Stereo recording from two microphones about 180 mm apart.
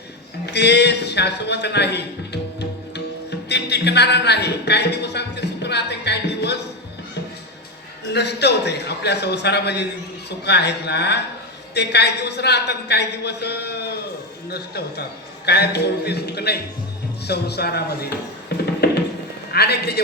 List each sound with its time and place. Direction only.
0.5 s a man's voice: 70° left (ahead or behind)
8.1 s a man's voice: 70° left (ahead or behind)